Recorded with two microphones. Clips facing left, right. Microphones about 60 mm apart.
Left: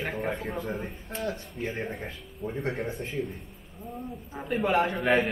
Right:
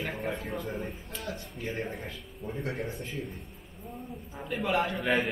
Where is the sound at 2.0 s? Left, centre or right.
Centre.